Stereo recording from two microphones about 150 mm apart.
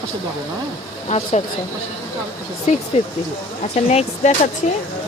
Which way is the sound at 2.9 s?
45° left (ahead or behind).